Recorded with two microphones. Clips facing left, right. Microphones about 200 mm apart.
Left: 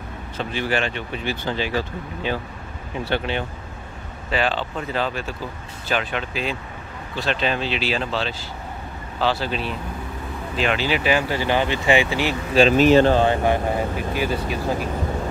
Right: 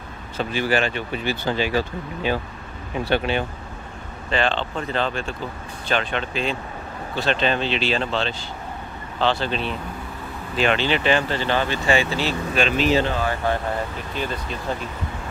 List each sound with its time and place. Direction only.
0.5 s speech: 5° right (ahead or behind)
4.3 s speech: 5° left (ahead or behind)
12.5 s speech: 35° left (ahead or behind)
13.1 s speech: 25° left (ahead or behind)
14.1 s speech: 10° left (ahead or behind)